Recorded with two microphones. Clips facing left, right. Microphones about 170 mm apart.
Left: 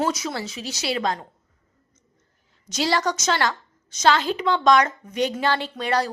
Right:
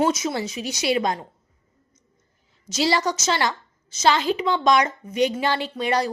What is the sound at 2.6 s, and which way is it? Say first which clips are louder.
A woman's voice: right 1 dB; 5° right (ahead or behind).